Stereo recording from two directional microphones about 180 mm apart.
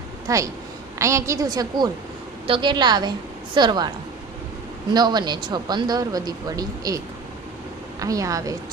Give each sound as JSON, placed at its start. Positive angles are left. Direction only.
{"t": 0.3, "sound": "a woman's voice", "side_deg": -20}
{"t": 4.9, "sound": "speech", "side_deg": -25}